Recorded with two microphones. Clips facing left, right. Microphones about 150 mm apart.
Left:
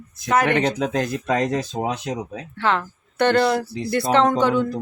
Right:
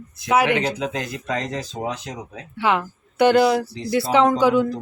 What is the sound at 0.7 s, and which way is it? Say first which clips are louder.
Speech: left 4 dB; 50° left (ahead or behind).